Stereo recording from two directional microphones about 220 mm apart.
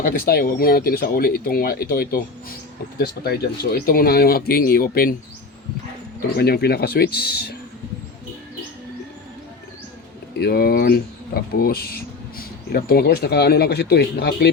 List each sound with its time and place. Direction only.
0.0 s speech: 45° left (ahead or behind)
6.3 s speech: 45° left (ahead or behind)
10.4 s speech: 45° left (ahead or behind)